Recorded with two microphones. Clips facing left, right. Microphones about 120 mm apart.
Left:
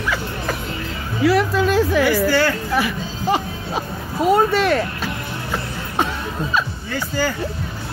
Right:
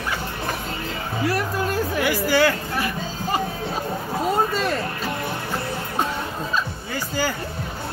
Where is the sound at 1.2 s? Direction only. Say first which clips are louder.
Left 8 dB; 90° left.